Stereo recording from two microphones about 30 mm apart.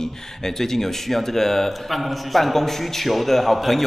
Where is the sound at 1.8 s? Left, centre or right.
Centre.